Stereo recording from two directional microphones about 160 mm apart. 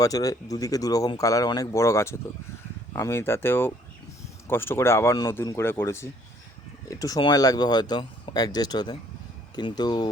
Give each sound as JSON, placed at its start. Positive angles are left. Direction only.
{"t": 0.0, "sound": "speech", "side_deg": 20}